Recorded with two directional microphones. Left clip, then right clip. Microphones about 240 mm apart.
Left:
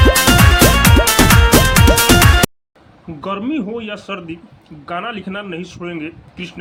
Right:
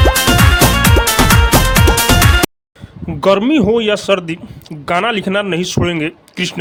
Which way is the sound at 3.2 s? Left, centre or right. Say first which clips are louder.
Right 11 dB; right.